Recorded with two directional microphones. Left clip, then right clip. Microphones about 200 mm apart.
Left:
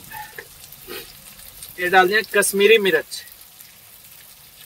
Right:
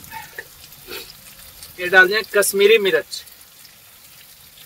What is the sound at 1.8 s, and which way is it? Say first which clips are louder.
Speech: right 2 dB; 10° left (ahead or behind).